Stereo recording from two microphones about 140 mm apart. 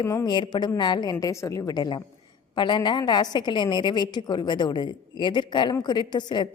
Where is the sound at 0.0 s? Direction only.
25° left (ahead or behind).